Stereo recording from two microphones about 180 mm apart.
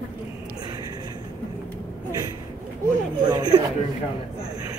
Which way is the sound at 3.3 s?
25° right (ahead or behind).